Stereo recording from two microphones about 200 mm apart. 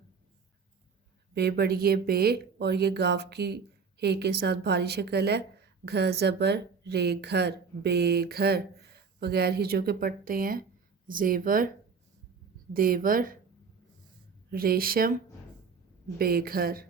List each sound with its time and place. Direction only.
1.3 s speech: 55° right (ahead or behind)
12.7 s speech: 45° right (ahead or behind)
14.5 s speech: 50° right (ahead or behind)
16.1 s speech: 50° right (ahead or behind)